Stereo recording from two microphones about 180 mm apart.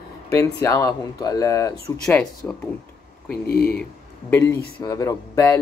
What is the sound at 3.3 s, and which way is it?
Speech, 60° left (ahead or behind).